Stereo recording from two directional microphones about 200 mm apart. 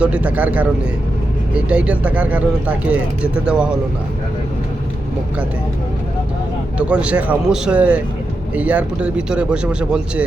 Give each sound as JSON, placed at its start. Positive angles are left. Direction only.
{"t": 0.0, "sound": "speech", "side_deg": -5}
{"t": 6.7, "sound": "speech", "side_deg": -5}